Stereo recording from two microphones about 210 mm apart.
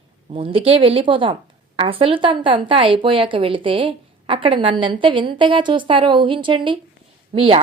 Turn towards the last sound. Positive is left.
turn(degrees=-25)  # may be behind; listen again after turning